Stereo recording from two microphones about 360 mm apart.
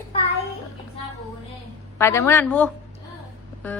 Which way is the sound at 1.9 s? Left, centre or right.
Centre.